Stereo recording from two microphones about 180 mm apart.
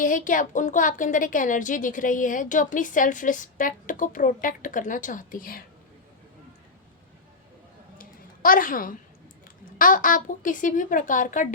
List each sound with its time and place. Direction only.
0.0 s a woman's voice: 45° left (ahead or behind)
7.9 s a sound: 50° left (ahead or behind)
9.7 s a woman's voice: 50° left (ahead or behind)